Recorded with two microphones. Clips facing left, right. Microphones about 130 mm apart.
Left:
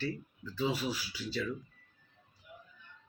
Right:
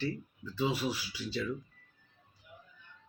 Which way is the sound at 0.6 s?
15° right (ahead or behind).